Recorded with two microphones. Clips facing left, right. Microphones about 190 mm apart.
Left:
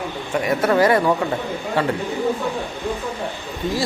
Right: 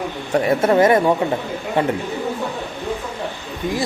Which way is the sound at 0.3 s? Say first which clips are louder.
Right 3 dB; 25° right (ahead or behind).